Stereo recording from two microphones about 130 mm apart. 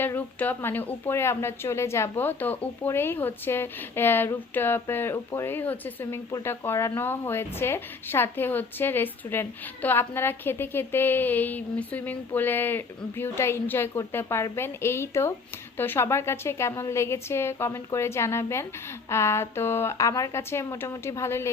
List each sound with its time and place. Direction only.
0.0 s a woman's voice: 15° left (ahead or behind)